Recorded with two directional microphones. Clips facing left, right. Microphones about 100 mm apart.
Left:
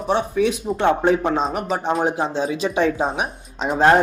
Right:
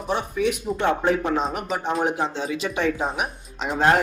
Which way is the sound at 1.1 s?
30° left (ahead or behind).